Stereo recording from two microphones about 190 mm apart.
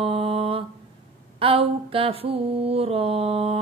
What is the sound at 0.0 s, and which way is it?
Mantra, 30° right (ahead or behind).